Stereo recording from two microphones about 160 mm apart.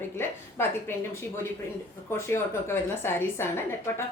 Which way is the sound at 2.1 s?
15° left (ahead or behind).